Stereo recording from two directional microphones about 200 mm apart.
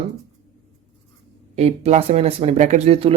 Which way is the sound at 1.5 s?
35° right (ahead or behind).